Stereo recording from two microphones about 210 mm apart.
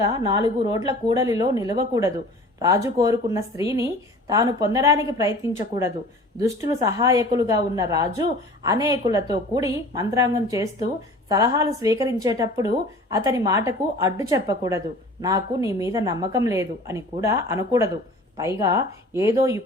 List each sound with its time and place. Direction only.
0.3 s speech: 20° right (ahead or behind)
6.6 s speech: 15° right (ahead or behind)